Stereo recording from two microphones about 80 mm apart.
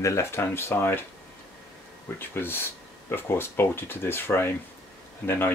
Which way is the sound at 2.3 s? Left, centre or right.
Left.